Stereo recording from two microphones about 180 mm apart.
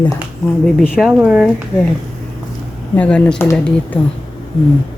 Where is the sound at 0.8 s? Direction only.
Centre (ahead or behind).